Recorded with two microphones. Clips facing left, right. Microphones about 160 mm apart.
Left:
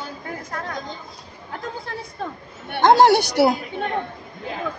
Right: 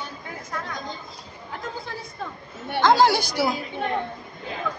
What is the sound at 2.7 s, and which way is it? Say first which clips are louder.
Speech: left 4 dB; 60° left (ahead or behind).